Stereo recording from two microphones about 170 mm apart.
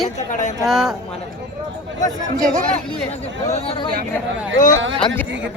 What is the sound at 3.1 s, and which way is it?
Speech, 40° left (ahead or behind).